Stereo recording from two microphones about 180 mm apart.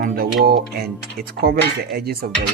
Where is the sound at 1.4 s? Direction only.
60° right (ahead or behind).